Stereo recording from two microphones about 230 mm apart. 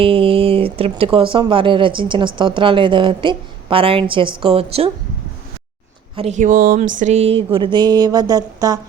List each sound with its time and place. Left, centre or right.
0.0 s speech: right
6.1 s speech: right